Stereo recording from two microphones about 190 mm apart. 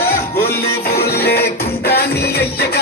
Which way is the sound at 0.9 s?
55° left (ahead or behind).